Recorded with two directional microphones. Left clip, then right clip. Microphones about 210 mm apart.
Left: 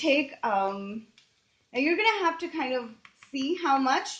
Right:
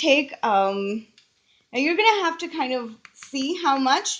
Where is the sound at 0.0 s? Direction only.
45° right (ahead or behind).